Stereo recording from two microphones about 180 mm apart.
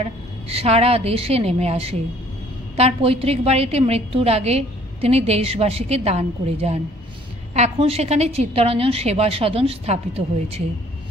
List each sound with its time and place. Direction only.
0.0 s a woman's voice: 35° right (ahead or behind)